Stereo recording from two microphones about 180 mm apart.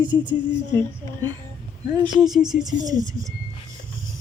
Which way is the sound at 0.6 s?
25° right (ahead or behind).